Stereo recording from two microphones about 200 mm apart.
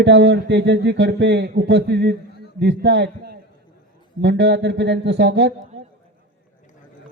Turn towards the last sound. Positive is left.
turn(degrees=-60)  # may be behind; listen again after turning